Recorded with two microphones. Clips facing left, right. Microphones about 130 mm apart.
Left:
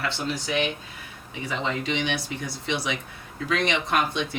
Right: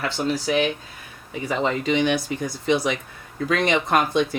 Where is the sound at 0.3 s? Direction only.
40° right (ahead or behind).